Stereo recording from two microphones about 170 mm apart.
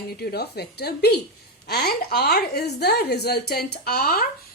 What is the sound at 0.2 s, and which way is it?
A woman's voice, 70° left (ahead or behind).